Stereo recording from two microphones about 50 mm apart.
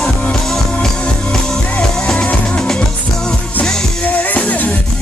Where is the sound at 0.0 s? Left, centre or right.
Centre.